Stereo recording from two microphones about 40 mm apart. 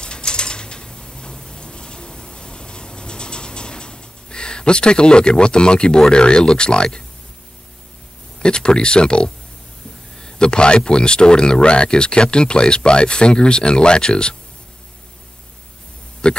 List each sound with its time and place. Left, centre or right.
0.0 s pulleys: left
8.4 s speech: left
16.2 s speech: left